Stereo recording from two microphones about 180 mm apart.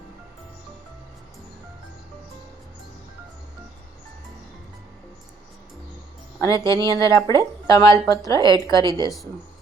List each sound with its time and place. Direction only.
6.4 s a woman's voice: 20° left (ahead or behind)